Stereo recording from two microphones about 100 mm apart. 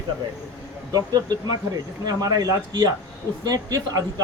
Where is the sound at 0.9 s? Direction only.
40° right (ahead or behind).